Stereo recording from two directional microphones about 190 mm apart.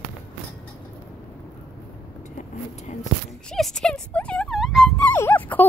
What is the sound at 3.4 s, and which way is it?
Speech, centre (ahead or behind).